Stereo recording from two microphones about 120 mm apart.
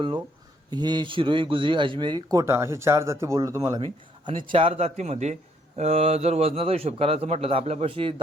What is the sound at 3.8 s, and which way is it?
A man's voice, 45° right (ahead or behind).